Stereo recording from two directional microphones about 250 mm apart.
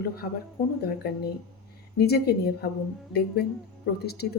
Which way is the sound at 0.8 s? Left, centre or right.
Left.